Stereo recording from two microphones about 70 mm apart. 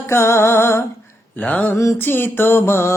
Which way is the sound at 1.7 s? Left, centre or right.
Left.